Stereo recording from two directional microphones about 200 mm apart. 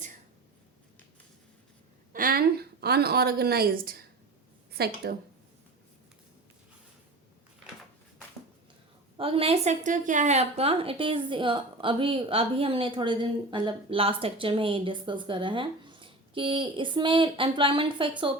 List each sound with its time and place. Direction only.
2.1 s a woman's voice: 45° right (ahead or behind)
9.1 s a woman's voice: 25° right (ahead or behind)